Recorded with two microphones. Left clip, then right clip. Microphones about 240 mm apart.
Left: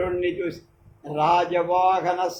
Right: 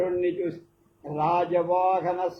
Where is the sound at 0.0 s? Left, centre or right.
Left.